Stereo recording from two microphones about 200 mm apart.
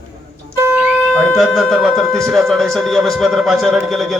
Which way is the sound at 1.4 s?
Centre (ahead or behind).